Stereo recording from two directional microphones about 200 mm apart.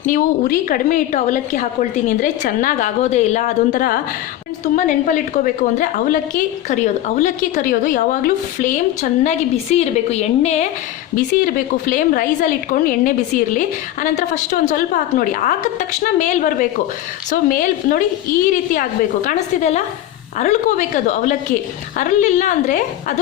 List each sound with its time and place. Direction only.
0.0 s a woman's voice: 45° left (ahead or behind)
11.3 s a woman's voice: 45° left (ahead or behind)